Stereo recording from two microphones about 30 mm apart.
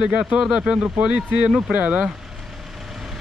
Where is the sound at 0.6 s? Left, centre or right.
Right.